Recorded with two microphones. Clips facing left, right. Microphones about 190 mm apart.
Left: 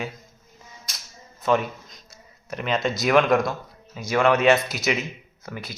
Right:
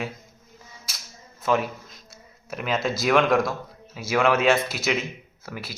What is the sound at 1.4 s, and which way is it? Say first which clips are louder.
Speech: left 1 dB; centre (ahead or behind).